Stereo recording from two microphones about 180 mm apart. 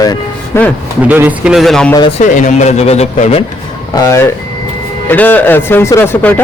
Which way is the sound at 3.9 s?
20° left (ahead or behind).